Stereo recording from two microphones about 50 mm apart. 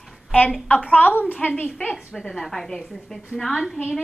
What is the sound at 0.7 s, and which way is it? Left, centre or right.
A woman's voice, left.